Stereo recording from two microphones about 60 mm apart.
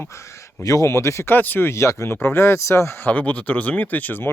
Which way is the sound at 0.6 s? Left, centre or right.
Left.